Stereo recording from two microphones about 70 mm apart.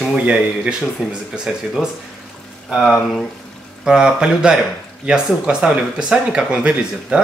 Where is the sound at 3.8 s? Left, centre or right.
Centre.